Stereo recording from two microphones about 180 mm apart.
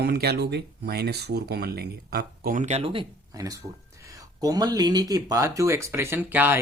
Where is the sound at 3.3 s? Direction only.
20° right (ahead or behind).